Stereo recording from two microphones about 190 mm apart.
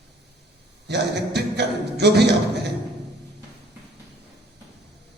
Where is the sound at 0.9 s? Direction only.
60° right (ahead or behind).